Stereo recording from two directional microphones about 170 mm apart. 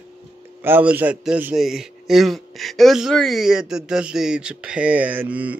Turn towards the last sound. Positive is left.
turn(degrees=-10)  # may be behind; listen again after turning